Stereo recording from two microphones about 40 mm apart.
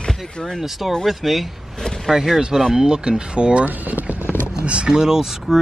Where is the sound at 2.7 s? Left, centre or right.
Right.